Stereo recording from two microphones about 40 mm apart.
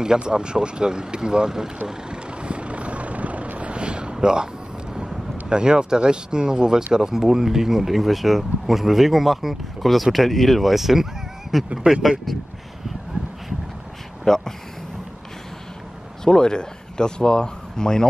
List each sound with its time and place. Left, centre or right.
0.0 s speech: centre
1.9 s vehicle: right
4.9 s speech: right; by 11.1 s centre
11.7 s speech: centre
12.3 s speech: centre
13.2 s a sound: right
14.2 s speech: centre
16.3 s speech: centre